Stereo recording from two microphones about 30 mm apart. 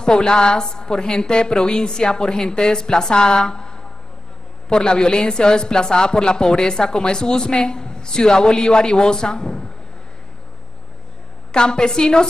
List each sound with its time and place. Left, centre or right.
0.0 s speech: left
11.5 s speech: left